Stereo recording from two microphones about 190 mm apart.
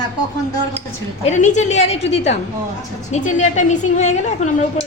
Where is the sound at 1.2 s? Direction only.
40° left (ahead or behind).